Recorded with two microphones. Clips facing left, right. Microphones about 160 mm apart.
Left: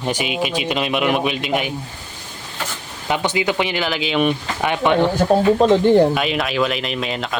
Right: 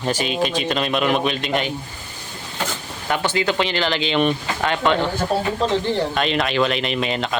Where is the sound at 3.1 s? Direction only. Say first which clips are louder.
Left 1 dB; 15° left (ahead or behind).